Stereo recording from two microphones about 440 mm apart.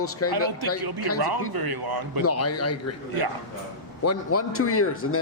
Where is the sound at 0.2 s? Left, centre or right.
Left.